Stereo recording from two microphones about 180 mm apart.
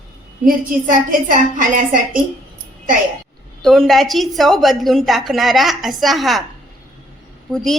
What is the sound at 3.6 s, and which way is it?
A woman's voice, centre (ahead or behind).